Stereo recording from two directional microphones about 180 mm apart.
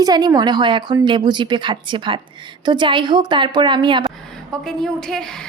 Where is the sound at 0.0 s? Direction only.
20° right (ahead or behind).